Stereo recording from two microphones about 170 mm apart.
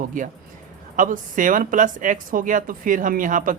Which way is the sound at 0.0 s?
50° right (ahead or behind).